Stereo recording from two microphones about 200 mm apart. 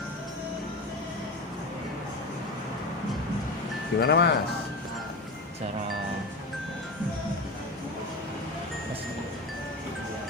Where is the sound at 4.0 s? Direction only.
55° left (ahead or behind).